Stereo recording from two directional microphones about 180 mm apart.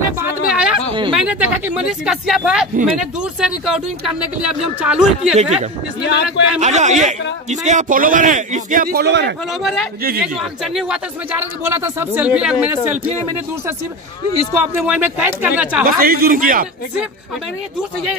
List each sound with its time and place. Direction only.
0.2 s a sound: 5° right (ahead or behind)
1.1 s speech: 5° right (ahead or behind)
5.3 s speech: 35° right (ahead or behind)
6.0 s speech: 75° left (ahead or behind)
6.6 s a man's voice: 40° right (ahead or behind); by 9.3 s 70° right (ahead or behind)
9.6 s speech: centre (ahead or behind)
11.6 s speech: 15° right (ahead or behind)
14.6 s speech: 10° right (ahead or behind)
15.8 s a man's voice: 55° right (ahead or behind)